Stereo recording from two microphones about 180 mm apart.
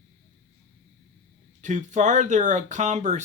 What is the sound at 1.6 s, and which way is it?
Speech, 40° right (ahead or behind).